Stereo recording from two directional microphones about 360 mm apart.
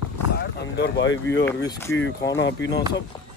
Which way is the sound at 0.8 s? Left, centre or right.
Left.